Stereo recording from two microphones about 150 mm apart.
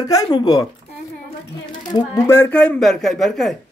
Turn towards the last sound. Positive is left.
turn(degrees=0)  # may be behind; listen again after turning